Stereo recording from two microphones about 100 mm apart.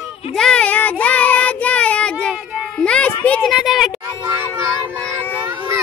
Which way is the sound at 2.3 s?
10° right (ahead or behind).